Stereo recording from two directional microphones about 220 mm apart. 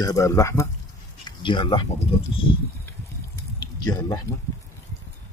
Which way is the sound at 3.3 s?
15° left (ahead or behind).